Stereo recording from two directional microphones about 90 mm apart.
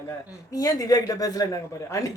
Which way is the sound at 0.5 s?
45° left (ahead or behind).